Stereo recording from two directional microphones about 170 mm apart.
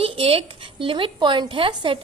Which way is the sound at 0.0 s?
35° right (ahead or behind).